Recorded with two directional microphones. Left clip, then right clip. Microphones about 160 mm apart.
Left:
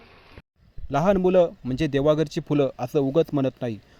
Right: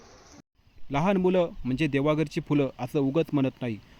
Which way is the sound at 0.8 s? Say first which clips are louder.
Left 4 dB; 20° left (ahead or behind).